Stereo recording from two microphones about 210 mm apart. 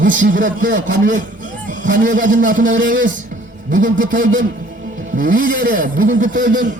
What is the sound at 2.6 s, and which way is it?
Speech, 65° right (ahead or behind).